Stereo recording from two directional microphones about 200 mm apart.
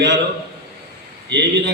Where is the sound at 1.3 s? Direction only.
60° right (ahead or behind).